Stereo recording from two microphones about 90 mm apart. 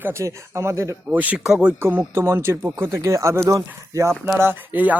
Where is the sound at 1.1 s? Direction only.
15° right (ahead or behind).